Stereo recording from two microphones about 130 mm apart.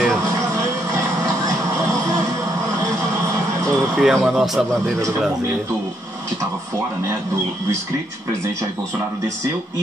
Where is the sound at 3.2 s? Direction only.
25° right (ahead or behind).